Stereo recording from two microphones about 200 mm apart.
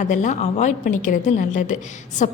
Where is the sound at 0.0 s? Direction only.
40° left (ahead or behind).